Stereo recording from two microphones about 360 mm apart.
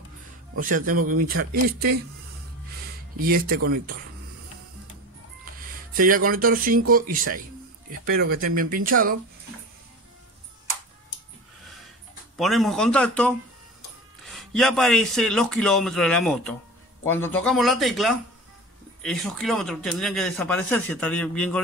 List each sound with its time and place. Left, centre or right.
0.6 s speech: right
3.2 s speech: right
5.9 s speech: right
12.4 s speech: centre